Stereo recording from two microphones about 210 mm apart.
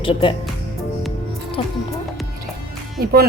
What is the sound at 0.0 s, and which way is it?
Speech, 25° left (ahead or behind).